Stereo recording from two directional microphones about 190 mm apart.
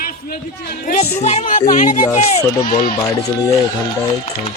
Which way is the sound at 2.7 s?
45° left (ahead or behind).